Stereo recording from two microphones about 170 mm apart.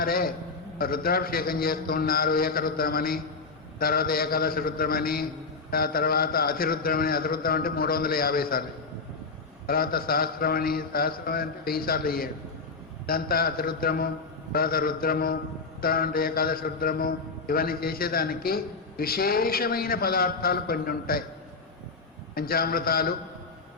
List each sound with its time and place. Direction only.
0.0 s a man's voice: 60° left (ahead or behind)
9.6 s a man's voice: 60° left (ahead or behind)
22.4 s a man's voice: 60° left (ahead or behind)